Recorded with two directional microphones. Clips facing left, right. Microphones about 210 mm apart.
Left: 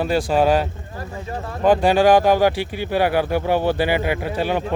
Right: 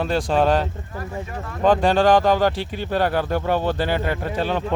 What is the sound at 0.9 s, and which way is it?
Speech, 30° left (ahead or behind).